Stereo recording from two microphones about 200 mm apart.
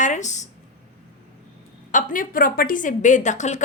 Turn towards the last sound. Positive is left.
turn(degrees=35)  # may be behind; listen again after turning